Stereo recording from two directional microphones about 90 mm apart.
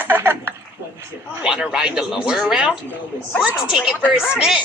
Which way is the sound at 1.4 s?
10° right (ahead or behind).